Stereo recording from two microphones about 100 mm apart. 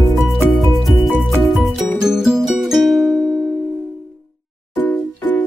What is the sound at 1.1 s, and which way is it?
Music, 15° right (ahead or behind).